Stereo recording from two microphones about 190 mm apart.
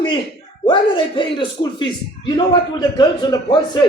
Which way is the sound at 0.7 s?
25° left (ahead or behind).